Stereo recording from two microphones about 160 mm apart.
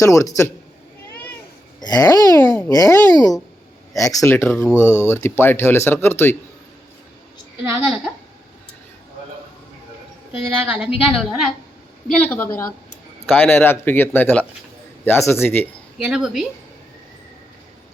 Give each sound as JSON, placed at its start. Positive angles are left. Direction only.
{"t": 0.0, "sound": "a child's voice", "side_deg": 20}
{"t": 1.8, "sound": "a child's voice", "side_deg": 25}
{"t": 7.8, "sound": "a woman's voice", "side_deg": -5}
{"t": 10.3, "sound": "a woman's voice", "side_deg": -10}
{"t": 12.0, "sound": "speech", "side_deg": 10}
{"t": 16.0, "sound": "a woman's voice", "side_deg": -5}